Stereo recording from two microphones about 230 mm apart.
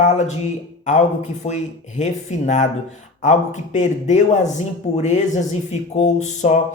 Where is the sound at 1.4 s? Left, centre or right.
Left.